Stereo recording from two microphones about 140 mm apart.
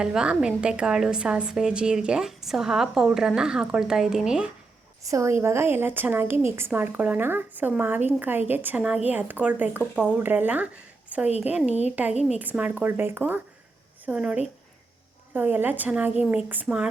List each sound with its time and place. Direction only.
0.0 s a woman's voice: 5° right (ahead or behind)
5.0 s speech: 20° right (ahead or behind)